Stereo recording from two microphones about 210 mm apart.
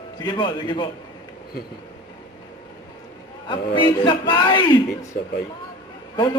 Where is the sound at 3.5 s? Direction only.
20° left (ahead or behind).